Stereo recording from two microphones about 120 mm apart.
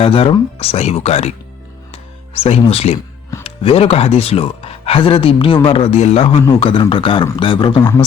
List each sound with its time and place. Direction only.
0.0 s speech: 50° left (ahead or behind)
1.9 s music: 50° left (ahead or behind)
3.4 s speech: 50° left (ahead or behind)
6.2 s speech: 45° left (ahead or behind)